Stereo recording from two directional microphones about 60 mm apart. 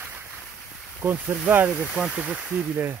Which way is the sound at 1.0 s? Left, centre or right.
Right.